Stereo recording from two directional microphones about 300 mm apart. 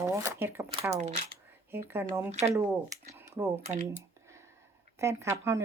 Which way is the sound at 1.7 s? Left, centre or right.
Centre.